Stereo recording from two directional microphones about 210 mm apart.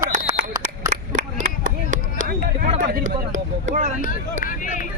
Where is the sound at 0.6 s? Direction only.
35° right (ahead or behind).